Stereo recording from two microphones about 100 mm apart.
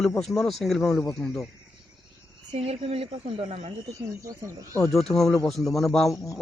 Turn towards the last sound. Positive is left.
turn(degrees=0)  # may be behind; listen again after turning